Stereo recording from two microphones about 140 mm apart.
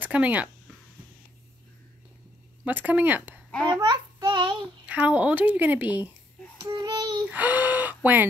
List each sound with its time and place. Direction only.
0.0 s speech: 10° right (ahead or behind)
2.6 s a woman's voice: 10° right (ahead or behind)
3.7 s child singing: 30° right (ahead or behind)
4.8 s a woman's voice: 10° right (ahead or behind)
6.6 s child singing: 30° right (ahead or behind)
7.2 s speech: 10° right (ahead or behind)